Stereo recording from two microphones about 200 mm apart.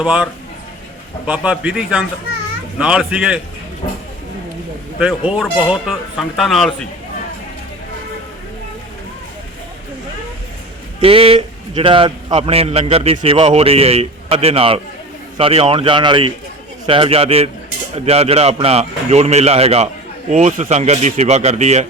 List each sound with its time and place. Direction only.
0.0 s speech: 5° right (ahead or behind)
1.3 s speech: 5° right (ahead or behind)
5.3 s speech: 5° right (ahead or behind)
11.0 s a man's voice: 30° right (ahead or behind)